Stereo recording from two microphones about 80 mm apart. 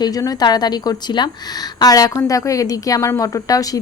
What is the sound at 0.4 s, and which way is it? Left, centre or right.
A woman's voice, left.